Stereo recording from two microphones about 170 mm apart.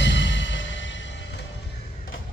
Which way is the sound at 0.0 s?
90° left.